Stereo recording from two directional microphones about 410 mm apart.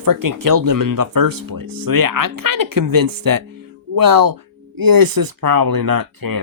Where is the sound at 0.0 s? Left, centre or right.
Right.